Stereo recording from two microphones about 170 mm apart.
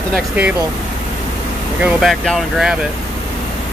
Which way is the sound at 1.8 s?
Centre (ahead or behind).